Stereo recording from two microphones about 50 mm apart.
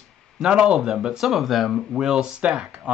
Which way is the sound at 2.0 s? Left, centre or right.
Centre.